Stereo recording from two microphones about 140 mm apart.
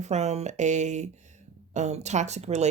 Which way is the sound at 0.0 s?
55° right (ahead or behind).